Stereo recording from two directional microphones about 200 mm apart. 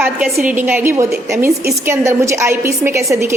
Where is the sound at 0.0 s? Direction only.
5° right (ahead or behind).